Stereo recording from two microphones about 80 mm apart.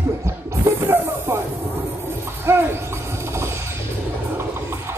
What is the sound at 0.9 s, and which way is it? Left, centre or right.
Music, right.